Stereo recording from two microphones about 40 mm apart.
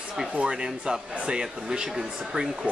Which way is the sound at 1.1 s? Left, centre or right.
Right.